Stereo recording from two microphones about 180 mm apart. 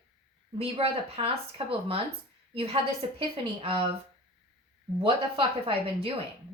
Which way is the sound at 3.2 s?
30° right (ahead or behind).